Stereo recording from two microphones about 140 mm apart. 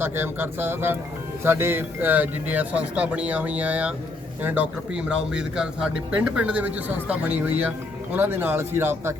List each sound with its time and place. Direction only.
0.0 s speech: 15° right (ahead or behind)